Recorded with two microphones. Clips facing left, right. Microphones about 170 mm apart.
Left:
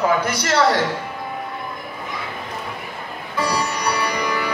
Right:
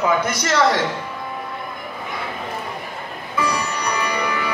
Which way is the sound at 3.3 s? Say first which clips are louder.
Left 1 dB; 35° left (ahead or behind).